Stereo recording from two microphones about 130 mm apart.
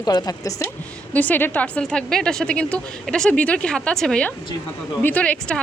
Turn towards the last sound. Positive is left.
turn(degrees=10)  # may be behind; listen again after turning